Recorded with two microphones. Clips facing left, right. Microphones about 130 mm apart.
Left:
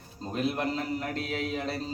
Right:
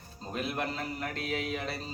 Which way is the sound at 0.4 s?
35° left (ahead or behind).